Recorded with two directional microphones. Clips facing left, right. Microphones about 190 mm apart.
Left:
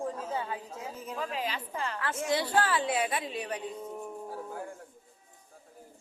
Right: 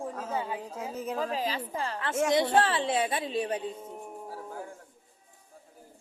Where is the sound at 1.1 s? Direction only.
40° right (ahead or behind).